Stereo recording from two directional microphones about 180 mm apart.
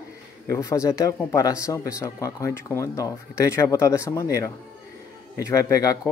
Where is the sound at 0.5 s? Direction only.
15° left (ahead or behind).